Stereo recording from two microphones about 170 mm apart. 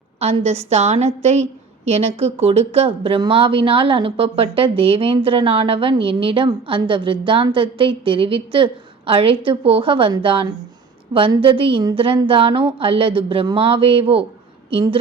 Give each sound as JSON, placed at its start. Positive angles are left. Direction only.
{"t": 0.2, "sound": "a woman's voice", "side_deg": -40}